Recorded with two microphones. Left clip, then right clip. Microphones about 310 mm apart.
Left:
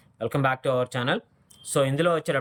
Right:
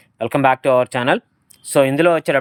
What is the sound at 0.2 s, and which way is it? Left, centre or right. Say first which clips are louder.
Speech: right 10 dB; centre.